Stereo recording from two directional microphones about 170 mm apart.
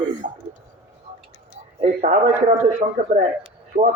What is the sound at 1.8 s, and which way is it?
A man's voice, 40° right (ahead or behind).